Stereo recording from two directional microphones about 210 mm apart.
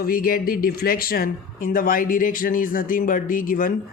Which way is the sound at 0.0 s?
45° left (ahead or behind).